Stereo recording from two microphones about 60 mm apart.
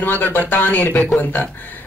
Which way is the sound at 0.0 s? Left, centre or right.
Left.